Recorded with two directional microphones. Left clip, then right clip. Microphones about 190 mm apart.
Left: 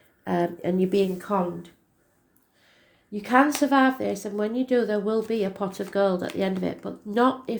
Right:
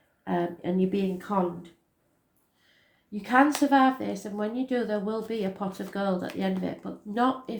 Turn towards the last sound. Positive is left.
turn(degrees=45)  # may be behind; listen again after turning